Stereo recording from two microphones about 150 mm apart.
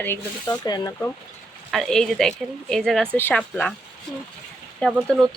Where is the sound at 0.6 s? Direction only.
25° left (ahead or behind).